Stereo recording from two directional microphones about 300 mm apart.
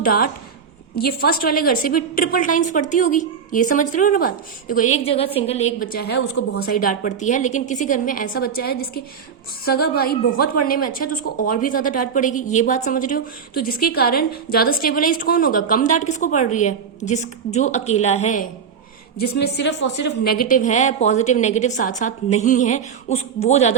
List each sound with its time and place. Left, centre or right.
0.0 s a woman's voice: left